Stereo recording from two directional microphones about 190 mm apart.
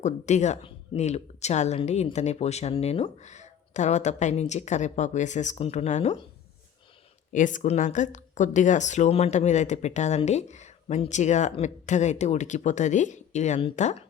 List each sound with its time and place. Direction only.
0.0 s speech: 40° left (ahead or behind)
7.3 s speech: 40° left (ahead or behind)